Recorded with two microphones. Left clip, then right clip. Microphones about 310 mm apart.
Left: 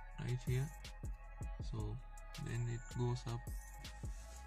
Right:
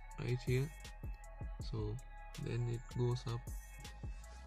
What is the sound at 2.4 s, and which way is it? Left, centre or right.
Speech, centre.